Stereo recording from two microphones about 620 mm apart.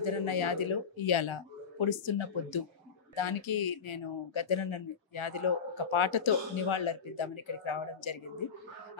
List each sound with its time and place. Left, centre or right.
0.0 s speech: left